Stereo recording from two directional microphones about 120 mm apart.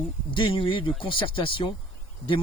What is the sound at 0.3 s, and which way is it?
Speech, 45° left (ahead or behind).